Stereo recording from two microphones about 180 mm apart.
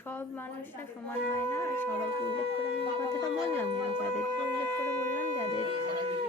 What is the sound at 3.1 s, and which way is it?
Shofar, 15° left (ahead or behind).